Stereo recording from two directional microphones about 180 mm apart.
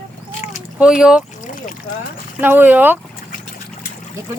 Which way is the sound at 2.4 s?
10° right (ahead or behind).